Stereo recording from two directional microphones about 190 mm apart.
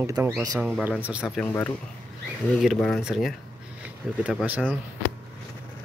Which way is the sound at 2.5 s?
Centre (ahead or behind).